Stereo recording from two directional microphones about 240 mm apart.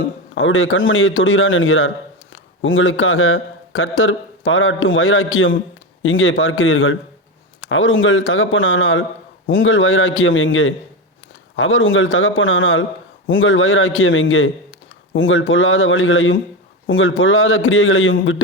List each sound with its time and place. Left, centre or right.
0.3 s a man's voice: left